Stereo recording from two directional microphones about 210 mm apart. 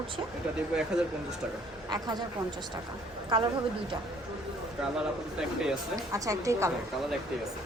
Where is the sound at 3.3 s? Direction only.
20° right (ahead or behind).